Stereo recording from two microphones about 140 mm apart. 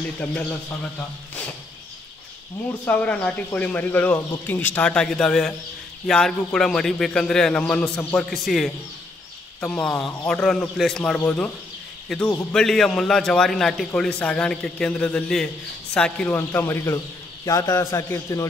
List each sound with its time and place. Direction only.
0.2 s speech: 10° left (ahead or behind)
2.8 s a man's voice: 10° left (ahead or behind)